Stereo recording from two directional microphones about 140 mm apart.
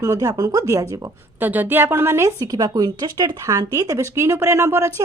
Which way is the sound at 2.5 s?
25° right (ahead or behind).